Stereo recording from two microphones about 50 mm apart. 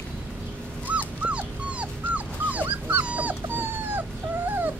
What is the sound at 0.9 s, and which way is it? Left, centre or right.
Dog, right.